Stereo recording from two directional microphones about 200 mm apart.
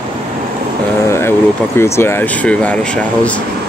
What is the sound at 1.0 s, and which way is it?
Vehicle, 15° left (ahead or behind).